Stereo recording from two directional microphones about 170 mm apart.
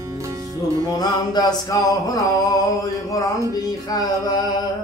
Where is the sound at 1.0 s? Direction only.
25° left (ahead or behind).